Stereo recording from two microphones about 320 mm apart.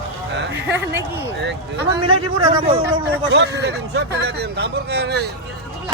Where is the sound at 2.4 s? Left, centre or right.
Centre.